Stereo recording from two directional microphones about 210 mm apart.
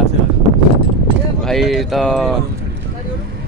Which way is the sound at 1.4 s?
Centre (ahead or behind).